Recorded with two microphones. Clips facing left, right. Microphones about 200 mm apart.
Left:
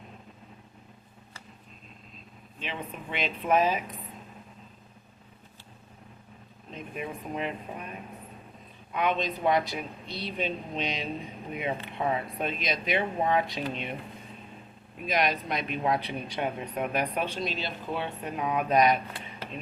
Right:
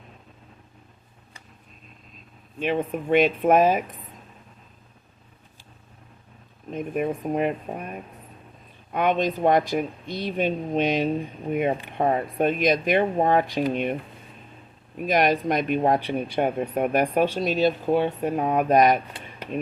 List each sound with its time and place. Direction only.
2.6 s speech: 50° right (ahead or behind)
6.7 s speech: 50° right (ahead or behind)
14.9 s speech: 45° right (ahead or behind)